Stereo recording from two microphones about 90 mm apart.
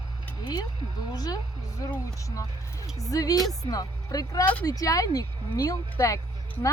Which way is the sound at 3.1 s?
45° left (ahead or behind).